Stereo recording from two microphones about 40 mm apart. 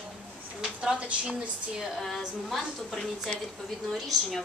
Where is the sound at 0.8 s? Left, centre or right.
Right.